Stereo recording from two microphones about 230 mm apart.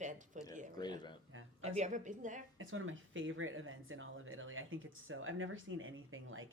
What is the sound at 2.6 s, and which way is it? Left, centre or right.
Speech, right.